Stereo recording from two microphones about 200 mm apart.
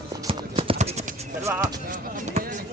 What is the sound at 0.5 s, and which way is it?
Clip-clop, 30° right (ahead or behind).